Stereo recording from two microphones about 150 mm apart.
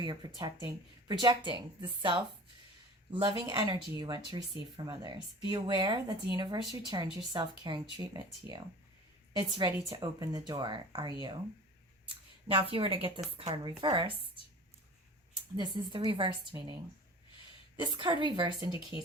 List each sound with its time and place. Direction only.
0.0 s speech: 30° right (ahead or behind)
12.5 s a woman's voice: 35° right (ahead or behind)
15.5 s a woman's voice: 30° right (ahead or behind)
17.7 s a woman's voice: 30° right (ahead or behind)